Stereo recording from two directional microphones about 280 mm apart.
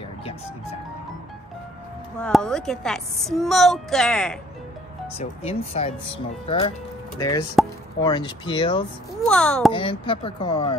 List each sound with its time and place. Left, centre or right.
2.1 s a woman's voice: centre
5.1 s speech: left
7.6 s a woman's voice: centre
8.0 s speech: centre
9.2 s a woman's voice: centre
9.7 s speech: centre